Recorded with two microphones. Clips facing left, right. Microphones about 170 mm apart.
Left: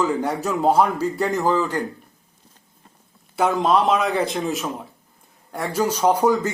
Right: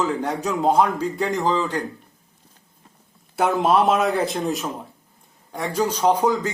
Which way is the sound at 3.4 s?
5° right (ahead or behind).